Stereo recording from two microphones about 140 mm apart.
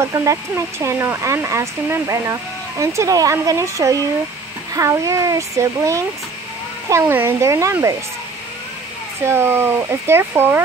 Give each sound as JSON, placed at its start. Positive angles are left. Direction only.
{"t": 0.0, "sound": "speech", "side_deg": -20}
{"t": 9.2, "sound": "speech", "side_deg": -15}